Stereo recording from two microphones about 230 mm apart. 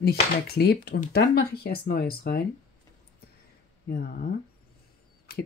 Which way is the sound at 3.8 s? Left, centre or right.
Left.